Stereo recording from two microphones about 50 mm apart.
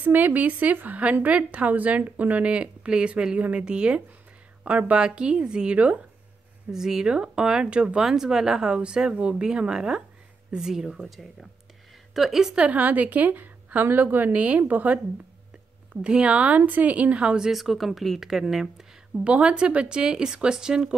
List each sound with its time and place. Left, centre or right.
0.0 s a woman's voice: right
6.7 s a woman's voice: centre
12.5 s a woman's voice: right
14.3 s a woman's voice: right
15.9 s speech: centre
17.5 s a woman's voice: centre
19.2 s speech: right